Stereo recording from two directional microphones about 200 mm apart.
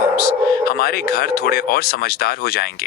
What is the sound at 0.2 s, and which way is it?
Speech, 50° left (ahead or behind).